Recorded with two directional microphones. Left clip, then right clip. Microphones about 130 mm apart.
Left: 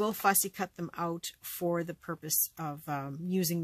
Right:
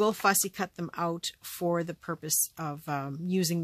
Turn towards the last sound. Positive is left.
turn(degrees=-30)  # may be behind; listen again after turning